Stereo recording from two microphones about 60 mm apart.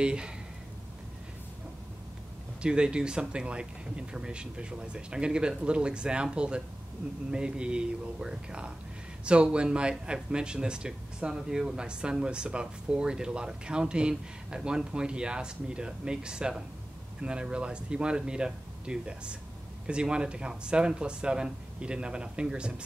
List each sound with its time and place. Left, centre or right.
0.0 s speech: centre
2.6 s speech: centre